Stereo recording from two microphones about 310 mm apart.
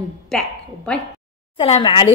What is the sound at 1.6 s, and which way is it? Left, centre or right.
Speech, centre.